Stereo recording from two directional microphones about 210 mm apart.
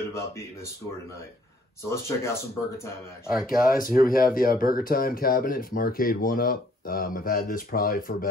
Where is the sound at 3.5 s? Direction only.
40° left (ahead or behind).